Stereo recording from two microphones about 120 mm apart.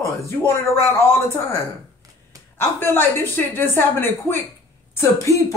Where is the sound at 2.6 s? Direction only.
20° left (ahead or behind).